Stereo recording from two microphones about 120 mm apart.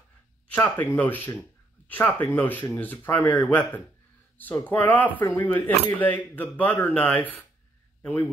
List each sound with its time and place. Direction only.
0.5 s speech: 15° left (ahead or behind)